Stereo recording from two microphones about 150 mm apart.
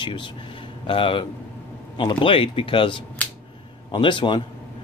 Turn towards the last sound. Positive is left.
turn(degrees=35)  # may be behind; listen again after turning